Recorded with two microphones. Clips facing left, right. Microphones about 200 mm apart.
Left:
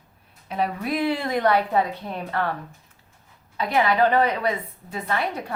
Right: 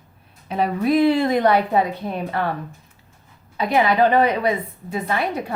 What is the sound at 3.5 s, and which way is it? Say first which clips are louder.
A woman's voice: right 3 dB; 15° right (ahead or behind).